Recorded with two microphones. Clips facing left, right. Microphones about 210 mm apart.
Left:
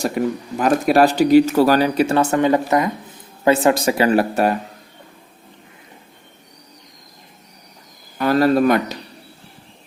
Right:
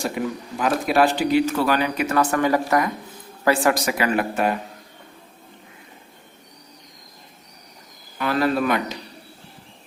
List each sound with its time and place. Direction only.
0.6 s speech: 40° left (ahead or behind)
8.2 s speech: 40° left (ahead or behind)